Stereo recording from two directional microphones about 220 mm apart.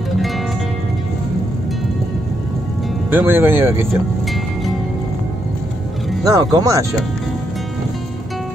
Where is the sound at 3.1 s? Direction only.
10° right (ahead or behind).